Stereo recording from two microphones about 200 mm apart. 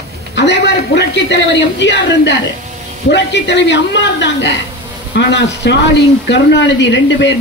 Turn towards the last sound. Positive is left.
turn(degrees=60)  # may be behind; listen again after turning